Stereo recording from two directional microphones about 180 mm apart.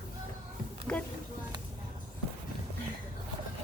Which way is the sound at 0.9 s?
5° left (ahead or behind).